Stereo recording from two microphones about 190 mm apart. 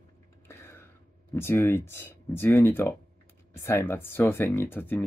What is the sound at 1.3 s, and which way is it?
Speech, 10° left (ahead or behind).